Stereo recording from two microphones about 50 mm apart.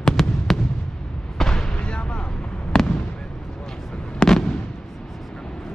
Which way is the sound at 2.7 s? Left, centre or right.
Centre.